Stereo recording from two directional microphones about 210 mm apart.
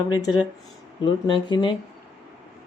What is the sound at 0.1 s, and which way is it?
Speech, 20° left (ahead or behind).